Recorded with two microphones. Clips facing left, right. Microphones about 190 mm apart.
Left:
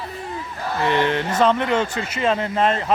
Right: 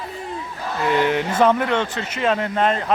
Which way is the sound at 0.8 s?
10° right (ahead or behind).